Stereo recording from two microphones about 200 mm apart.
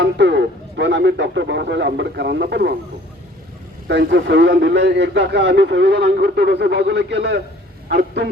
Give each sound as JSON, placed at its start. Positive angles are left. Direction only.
{"t": 0.0, "sound": "a man's voice", "side_deg": -60}
{"t": 3.8, "sound": "a man's voice", "side_deg": -60}